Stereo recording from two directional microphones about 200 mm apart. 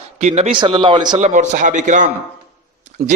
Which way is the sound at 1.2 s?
35° right (ahead or behind).